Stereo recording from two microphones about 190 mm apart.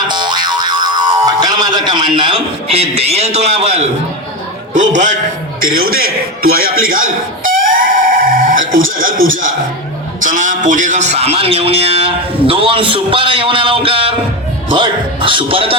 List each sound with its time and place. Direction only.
0.1 s boing: 25° right (ahead or behind)
4.7 s a man's voice: 40° right (ahead or behind)
6.8 s music: 45° right (ahead or behind)
9.0 s a man's voice: 45° right (ahead or behind); by 15.7 s 30° right (ahead or behind)